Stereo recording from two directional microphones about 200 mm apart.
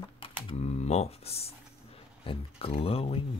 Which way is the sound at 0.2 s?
30° left (ahead or behind).